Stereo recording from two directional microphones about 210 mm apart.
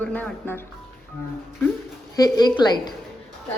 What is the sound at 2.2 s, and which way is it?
Speech, 20° left (ahead or behind).